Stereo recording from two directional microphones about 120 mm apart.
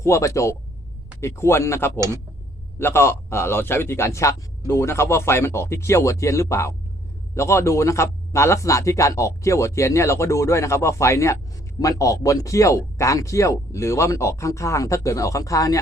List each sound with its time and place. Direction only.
0.0 s a man's voice: 25° left (ahead or behind)
2.0 s speech: 25° right (ahead or behind)
2.7 s a man's voice: 20° left (ahead or behind)